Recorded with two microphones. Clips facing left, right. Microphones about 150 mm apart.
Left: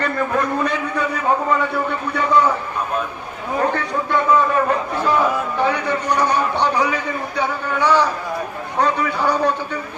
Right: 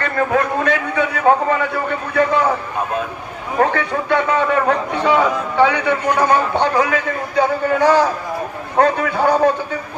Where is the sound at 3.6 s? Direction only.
75° right (ahead or behind).